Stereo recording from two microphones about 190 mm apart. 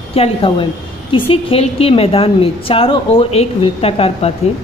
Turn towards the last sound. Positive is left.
turn(degrees=30)  # may be behind; listen again after turning